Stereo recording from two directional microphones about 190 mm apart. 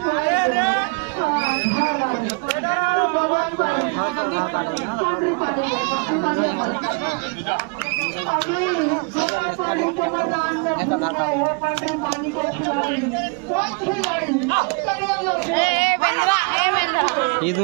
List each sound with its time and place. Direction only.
15.5 s chatter: 15° left (ahead or behind)